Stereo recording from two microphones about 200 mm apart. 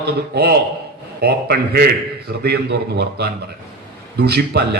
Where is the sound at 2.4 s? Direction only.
55° right (ahead or behind).